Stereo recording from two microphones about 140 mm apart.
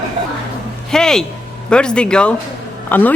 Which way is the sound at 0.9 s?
5° left (ahead or behind).